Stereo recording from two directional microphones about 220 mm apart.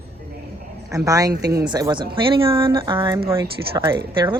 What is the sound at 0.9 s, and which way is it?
Speech, 15° right (ahead or behind).